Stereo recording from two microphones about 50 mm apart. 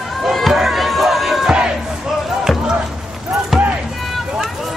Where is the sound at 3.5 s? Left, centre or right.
Centre.